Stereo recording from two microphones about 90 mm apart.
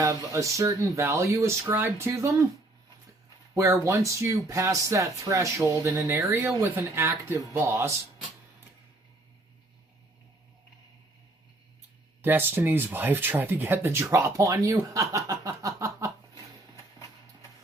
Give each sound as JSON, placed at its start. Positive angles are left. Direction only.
{"t": 0.0, "sound": "speech", "side_deg": -35}
{"t": 3.5, "sound": "speech", "side_deg": -30}
{"t": 12.2, "sound": "speech", "side_deg": -25}
{"t": 15.1, "sound": "snicker", "side_deg": -40}